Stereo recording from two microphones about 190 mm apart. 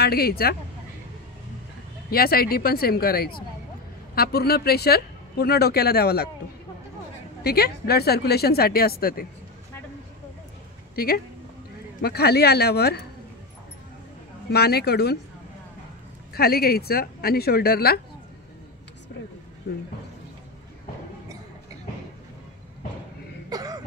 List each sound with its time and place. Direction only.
0.0 s speech: 55° left (ahead or behind)
2.0 s a man's voice: 55° left (ahead or behind)
7.4 s a man's voice: 55° left (ahead or behind)
11.0 s a man's voice: 55° left (ahead or behind)
14.5 s a man's voice: 55° left (ahead or behind)
16.3 s a man's voice: 55° left (ahead or behind)
23.5 s a sound: 20° right (ahead or behind)